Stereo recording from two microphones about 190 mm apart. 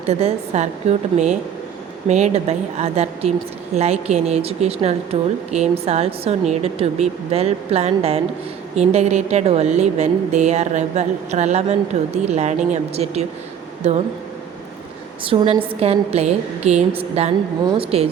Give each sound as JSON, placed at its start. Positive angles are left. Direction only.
{"t": 0.1, "sound": "speech", "side_deg": -35}
{"t": 15.2, "sound": "speech", "side_deg": -30}